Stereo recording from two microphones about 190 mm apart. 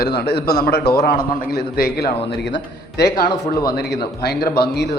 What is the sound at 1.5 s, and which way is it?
Speech, 55° left (ahead or behind).